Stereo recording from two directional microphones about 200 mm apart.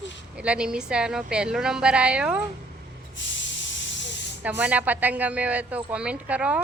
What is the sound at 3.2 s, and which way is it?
Spray, 65° left (ahead or behind).